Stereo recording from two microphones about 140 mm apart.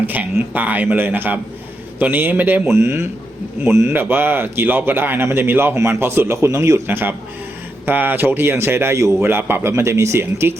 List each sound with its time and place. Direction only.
0.0 s speech: 10° right (ahead or behind)